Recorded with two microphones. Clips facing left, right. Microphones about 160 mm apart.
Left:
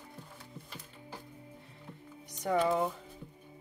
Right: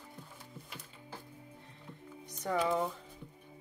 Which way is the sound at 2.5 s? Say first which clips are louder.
Left 3 dB; 5° left (ahead or behind).